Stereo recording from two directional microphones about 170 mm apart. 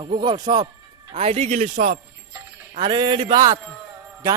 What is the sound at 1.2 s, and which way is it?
A man's voice, 35° right (ahead or behind).